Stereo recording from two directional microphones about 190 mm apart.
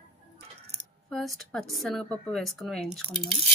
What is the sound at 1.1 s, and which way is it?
Speech, centre (ahead or behind).